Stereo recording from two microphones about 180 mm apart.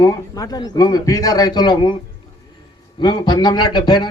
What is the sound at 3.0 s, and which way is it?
A man's voice, 25° left (ahead or behind).